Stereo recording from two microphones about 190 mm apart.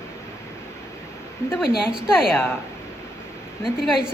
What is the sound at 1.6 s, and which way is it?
Speech, 5° right (ahead or behind).